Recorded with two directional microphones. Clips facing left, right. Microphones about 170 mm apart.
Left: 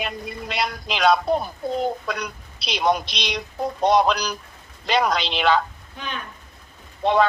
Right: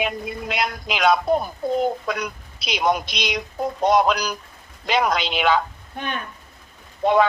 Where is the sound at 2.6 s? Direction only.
50° right (ahead or behind).